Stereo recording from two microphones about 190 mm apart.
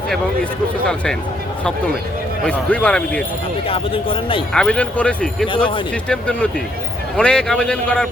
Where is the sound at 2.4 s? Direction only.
5° left (ahead or behind).